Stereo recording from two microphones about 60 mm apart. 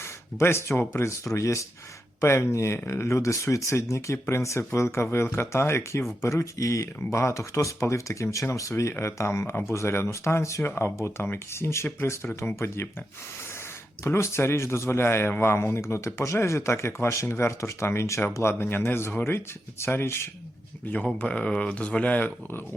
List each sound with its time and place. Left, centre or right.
0.0 s speech: left
2.2 s speech: left
6.2 s speech: left
8.8 s speech: left
14.0 s speech: left
18.6 s speech: left
21.2 s speech: centre